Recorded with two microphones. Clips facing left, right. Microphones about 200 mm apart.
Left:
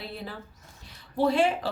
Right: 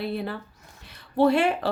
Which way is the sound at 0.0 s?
60° right (ahead or behind).